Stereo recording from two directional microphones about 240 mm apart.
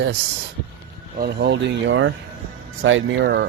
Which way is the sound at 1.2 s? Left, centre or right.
Right.